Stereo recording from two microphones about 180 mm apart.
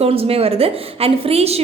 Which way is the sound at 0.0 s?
35° right (ahead or behind).